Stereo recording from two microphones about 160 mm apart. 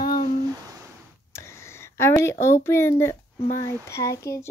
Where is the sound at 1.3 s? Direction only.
15° left (ahead or behind).